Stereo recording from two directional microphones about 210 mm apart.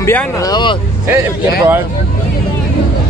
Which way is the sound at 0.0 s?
15° left (ahead or behind).